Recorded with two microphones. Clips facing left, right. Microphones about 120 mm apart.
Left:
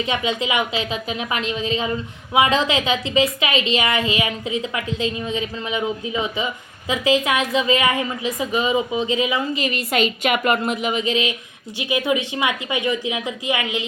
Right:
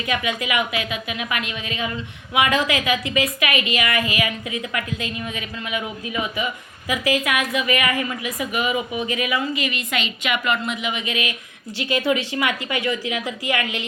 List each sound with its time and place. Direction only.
0.0 s a woman's voice: 25° left (ahead or behind)
9.6 s a woman's voice: 40° left (ahead or behind)
11.8 s a woman's voice: 15° left (ahead or behind)